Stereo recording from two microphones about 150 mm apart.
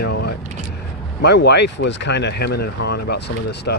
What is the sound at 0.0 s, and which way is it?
Vehicle, 90° left.